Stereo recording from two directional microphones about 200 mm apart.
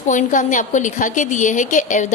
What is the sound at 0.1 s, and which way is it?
A woman's voice, 40° left (ahead or behind).